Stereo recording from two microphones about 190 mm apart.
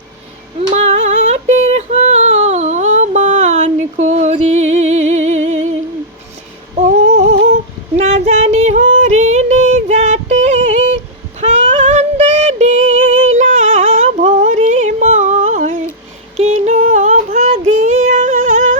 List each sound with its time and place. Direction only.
0.7 s female singing: 35° right (ahead or behind)
6.7 s humming: 40° right (ahead or behind)
7.5 s female singing: 35° right (ahead or behind)
16.4 s a sound: 40° right (ahead or behind)
18.1 s singing: 45° right (ahead or behind)